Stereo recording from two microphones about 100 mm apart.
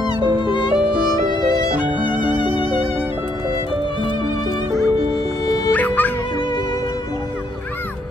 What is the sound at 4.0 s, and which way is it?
Music, 55° left (ahead or behind).